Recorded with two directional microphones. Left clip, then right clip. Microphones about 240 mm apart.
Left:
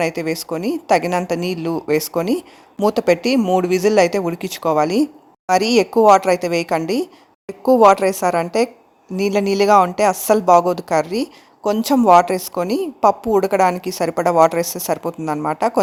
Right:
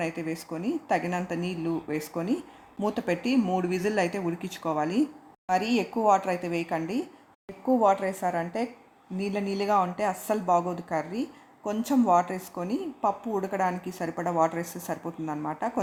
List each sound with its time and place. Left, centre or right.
0.0 s speech: left